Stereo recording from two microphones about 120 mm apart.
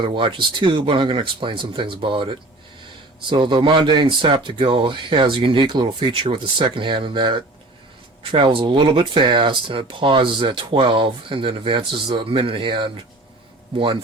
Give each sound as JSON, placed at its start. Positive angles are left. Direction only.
{"t": 0.0, "sound": "speech", "side_deg": -45}